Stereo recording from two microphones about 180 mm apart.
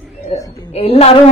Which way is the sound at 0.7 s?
35° left (ahead or behind).